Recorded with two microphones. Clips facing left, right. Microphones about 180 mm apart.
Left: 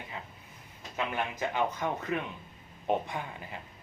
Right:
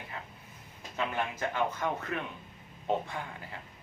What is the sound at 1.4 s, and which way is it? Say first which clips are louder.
Speech: left 2 dB; 15° left (ahead or behind).